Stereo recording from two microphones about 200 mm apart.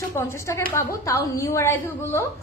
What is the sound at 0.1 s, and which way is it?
A woman's voice, 15° left (ahead or behind).